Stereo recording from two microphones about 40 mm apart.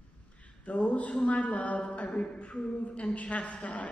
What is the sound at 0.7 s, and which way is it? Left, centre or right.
A woman's voice, left.